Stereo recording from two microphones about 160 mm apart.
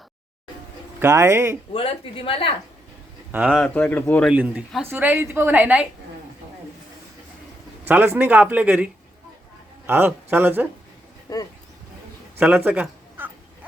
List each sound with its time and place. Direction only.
0.9 s a woman's voice: 15° right (ahead or behind)
1.7 s a woman's voice: 35° left (ahead or behind)
3.3 s a woman's voice: 10° right (ahead or behind)
3.6 s speech: 10° left (ahead or behind)
4.3 s a woman's voice: 10° right (ahead or behind)
7.9 s a woman's voice: 10° right (ahead or behind)
11.3 s speech: 25° left (ahead or behind)
12.4 s cat: 5° right (ahead or behind)